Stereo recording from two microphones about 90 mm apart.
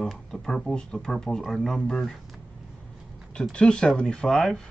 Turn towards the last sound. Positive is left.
turn(degrees=5)  # may be behind; listen again after turning